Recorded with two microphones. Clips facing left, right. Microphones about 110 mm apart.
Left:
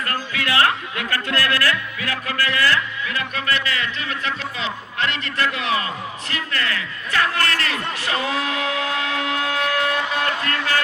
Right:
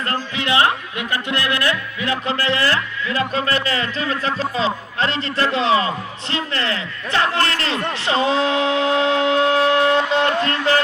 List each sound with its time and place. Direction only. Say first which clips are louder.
0.1 s a man's voice: right 3 dB; 20° right (ahead or behind)